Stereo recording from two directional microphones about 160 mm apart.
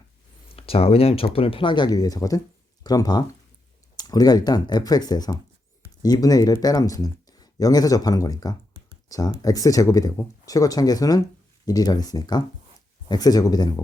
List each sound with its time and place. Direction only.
0.5 s speech: 35° left (ahead or behind)